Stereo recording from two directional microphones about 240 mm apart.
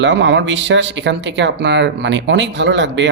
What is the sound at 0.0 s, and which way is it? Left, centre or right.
Speech, right.